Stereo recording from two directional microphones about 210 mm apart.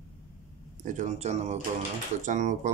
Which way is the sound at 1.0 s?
35° right (ahead or behind).